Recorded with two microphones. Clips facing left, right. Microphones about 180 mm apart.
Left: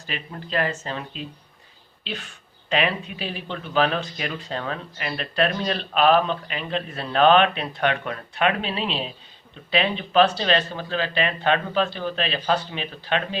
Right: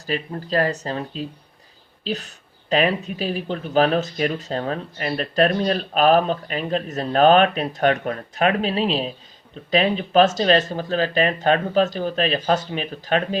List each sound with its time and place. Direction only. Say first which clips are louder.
0.0 s speech: right 8 dB; 40° right (ahead or behind)